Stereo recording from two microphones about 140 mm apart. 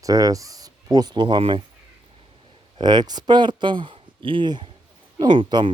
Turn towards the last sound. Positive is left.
turn(degrees=-35)  # may be behind; listen again after turning